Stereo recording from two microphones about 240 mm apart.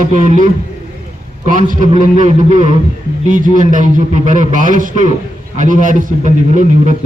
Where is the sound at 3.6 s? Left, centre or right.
Right.